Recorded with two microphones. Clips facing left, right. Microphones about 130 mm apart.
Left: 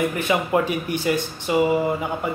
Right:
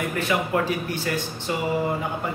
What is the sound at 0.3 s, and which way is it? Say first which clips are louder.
Mantra: left 2 dB; 20° left (ahead or behind).